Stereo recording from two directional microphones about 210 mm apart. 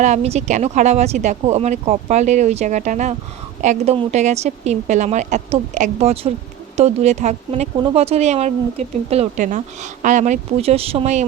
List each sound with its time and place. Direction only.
0.0 s speech: 30° right (ahead or behind)